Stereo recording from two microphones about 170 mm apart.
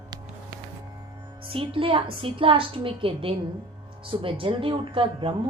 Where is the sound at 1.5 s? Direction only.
30° right (ahead or behind).